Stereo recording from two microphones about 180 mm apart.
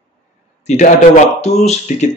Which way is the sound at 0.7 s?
45° left (ahead or behind).